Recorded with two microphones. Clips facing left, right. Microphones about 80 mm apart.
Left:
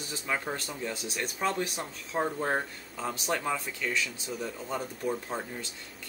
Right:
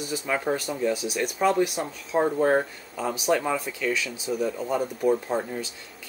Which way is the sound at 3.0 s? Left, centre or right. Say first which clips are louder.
Right 7 dB; centre.